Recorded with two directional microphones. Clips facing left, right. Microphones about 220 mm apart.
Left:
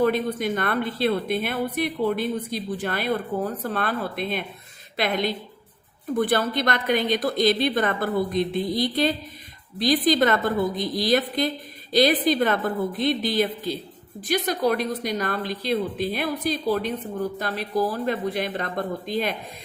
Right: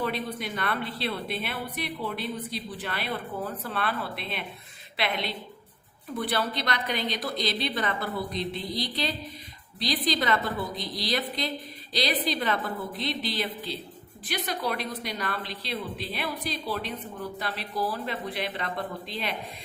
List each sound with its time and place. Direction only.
0.0 s a woman's voice: 45° left (ahead or behind)